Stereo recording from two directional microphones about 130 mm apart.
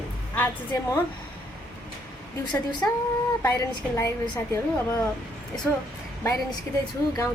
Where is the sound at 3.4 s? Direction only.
25° left (ahead or behind).